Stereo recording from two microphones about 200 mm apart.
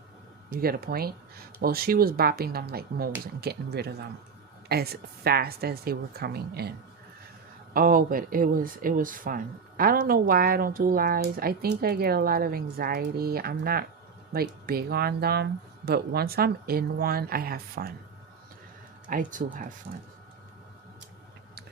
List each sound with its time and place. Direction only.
0.5 s speech: 50° right (ahead or behind)
19.0 s speech: 40° right (ahead or behind)